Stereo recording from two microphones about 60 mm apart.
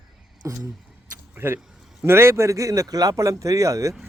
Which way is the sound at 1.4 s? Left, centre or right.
Right.